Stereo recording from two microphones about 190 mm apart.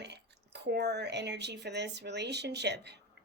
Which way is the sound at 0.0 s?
65° right (ahead or behind).